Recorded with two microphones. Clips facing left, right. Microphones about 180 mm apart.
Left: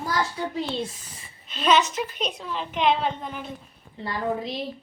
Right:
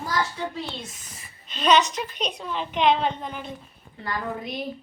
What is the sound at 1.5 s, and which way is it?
A woman's voice, 5° left (ahead or behind).